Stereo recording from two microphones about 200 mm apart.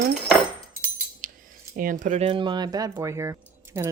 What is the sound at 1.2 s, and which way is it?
Keys jangling, 40° right (ahead or behind).